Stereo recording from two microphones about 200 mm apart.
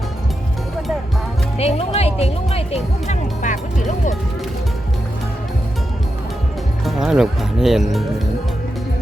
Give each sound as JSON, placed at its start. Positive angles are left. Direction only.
{"t": 1.5, "sound": "speech", "side_deg": 30}
{"t": 6.8, "sound": "speech", "side_deg": 0}